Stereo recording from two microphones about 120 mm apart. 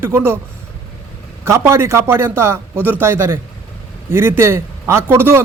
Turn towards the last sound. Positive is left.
turn(degrees=-20)  # may be behind; listen again after turning